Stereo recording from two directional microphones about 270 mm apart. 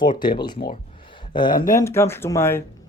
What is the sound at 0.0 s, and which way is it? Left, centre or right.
Speech, centre.